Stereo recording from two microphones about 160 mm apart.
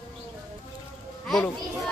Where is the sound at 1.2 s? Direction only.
5° left (ahead or behind).